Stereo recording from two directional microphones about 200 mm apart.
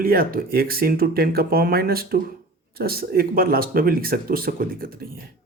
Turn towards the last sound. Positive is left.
turn(degrees=-45)  # may be behind; listen again after turning